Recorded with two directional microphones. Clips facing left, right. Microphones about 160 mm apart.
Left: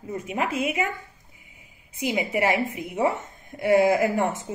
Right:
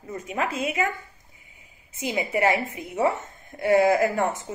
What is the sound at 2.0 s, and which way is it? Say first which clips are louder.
A woman's voice: even; 15° left (ahead or behind).